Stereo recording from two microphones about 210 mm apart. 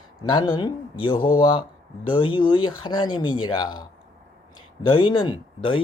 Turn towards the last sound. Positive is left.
turn(degrees=25)  # may be behind; listen again after turning